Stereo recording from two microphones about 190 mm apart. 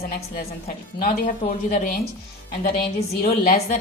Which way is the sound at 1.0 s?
45° left (ahead or behind).